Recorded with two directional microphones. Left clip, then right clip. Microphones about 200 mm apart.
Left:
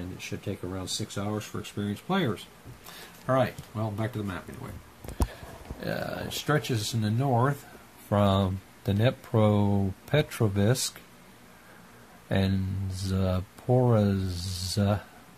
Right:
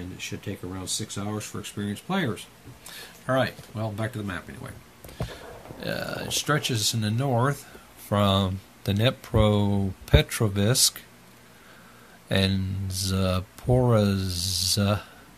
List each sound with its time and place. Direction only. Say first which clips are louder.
0.2 s speech: right 1 dB; 5° right (ahead or behind)
5.8 s speech: right 2 dB; centre (ahead or behind)
12.3 s speech: right 4 dB; 5° right (ahead or behind)